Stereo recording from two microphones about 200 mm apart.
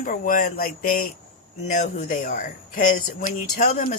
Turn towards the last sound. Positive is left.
turn(degrees=35)  # may be behind; listen again after turning